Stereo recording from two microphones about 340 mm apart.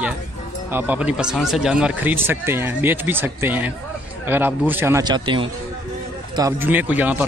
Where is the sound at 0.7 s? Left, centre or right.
Centre.